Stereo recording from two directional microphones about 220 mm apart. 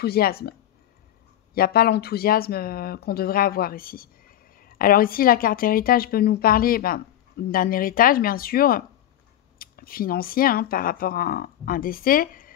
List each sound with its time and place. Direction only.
0.0 s speech: 45° left (ahead or behind)